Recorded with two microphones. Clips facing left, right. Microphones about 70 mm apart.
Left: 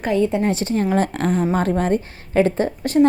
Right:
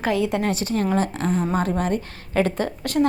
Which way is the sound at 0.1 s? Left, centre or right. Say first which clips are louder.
Left 4 dB; right.